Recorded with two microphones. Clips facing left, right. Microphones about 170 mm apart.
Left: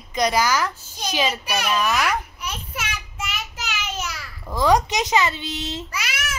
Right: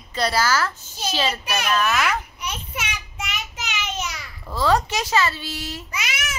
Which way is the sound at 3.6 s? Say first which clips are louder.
Right 1 dB; 5° left (ahead or behind).